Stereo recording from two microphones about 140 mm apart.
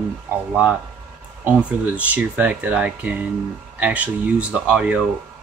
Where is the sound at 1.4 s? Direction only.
10° right (ahead or behind).